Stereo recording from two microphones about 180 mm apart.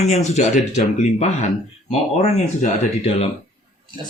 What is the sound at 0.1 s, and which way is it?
Speech, 40° left (ahead or behind).